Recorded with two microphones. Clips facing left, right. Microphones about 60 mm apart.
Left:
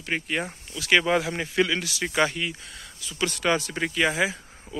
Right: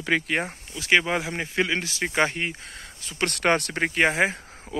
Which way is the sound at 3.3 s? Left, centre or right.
Right.